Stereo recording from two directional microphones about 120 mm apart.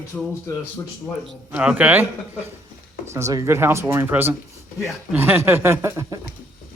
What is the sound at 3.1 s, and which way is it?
Speech, 25° right (ahead or behind).